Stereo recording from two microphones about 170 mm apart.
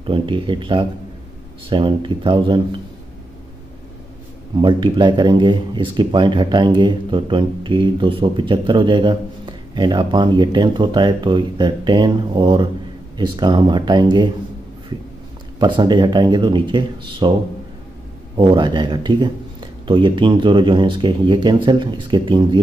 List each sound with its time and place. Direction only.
0.0 s speech: 30° right (ahead or behind)
4.6 s speech: 25° right (ahead or behind)
15.6 s speech: 25° right (ahead or behind)
18.3 s speech: 30° right (ahead or behind)